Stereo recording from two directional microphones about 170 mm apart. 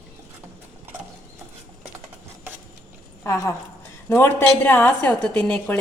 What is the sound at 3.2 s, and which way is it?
A woman's voice, 15° left (ahead or behind).